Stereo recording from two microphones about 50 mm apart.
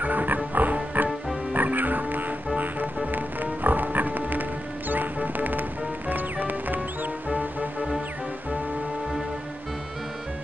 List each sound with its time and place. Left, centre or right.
0.0 s music: right